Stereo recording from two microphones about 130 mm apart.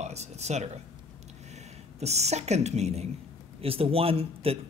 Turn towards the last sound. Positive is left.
turn(degrees=-50)  # may be behind; listen again after turning